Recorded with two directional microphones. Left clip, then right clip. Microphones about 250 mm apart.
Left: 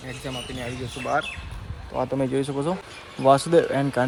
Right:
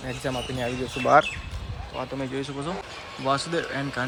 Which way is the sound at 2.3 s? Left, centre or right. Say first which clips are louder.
Left 5 dB; centre.